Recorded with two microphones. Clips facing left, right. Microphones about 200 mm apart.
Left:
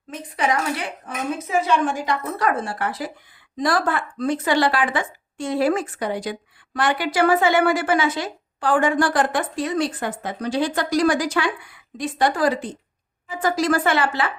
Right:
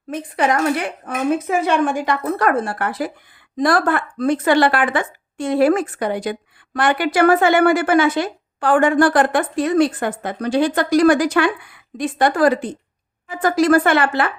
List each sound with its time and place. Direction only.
0.1 s a woman's voice: 55° right (ahead or behind)